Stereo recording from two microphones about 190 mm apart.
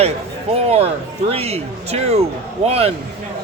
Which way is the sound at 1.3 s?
30° right (ahead or behind).